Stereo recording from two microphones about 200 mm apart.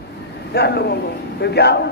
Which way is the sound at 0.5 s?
55° left (ahead or behind).